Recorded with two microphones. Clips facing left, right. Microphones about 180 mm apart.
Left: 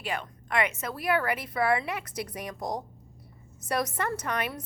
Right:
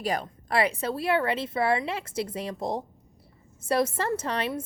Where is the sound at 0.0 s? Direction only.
35° right (ahead or behind).